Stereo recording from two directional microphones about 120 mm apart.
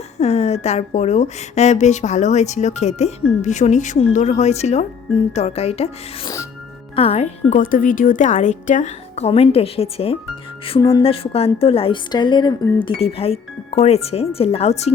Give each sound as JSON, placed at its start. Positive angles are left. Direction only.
{"t": 0.2, "sound": "a woman's voice", "side_deg": 65}
{"t": 6.9, "sound": "speech", "side_deg": 55}
{"t": 7.5, "sound": "a woman's voice", "side_deg": 90}
{"t": 12.1, "sound": "speech", "side_deg": 40}
{"t": 13.0, "sound": "speech", "side_deg": 55}